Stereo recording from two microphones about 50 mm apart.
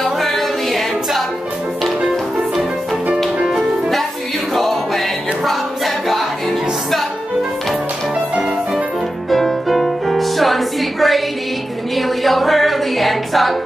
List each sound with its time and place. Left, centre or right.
0.2 s a capella: centre
3.4 s music: centre
9.3 s music: centre
11.9 s a capella: centre